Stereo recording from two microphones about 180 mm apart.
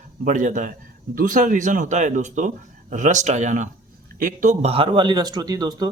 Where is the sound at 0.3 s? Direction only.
45° right (ahead or behind).